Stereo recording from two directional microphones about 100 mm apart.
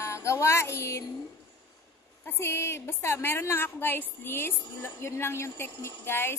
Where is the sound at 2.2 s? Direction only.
25° left (ahead or behind).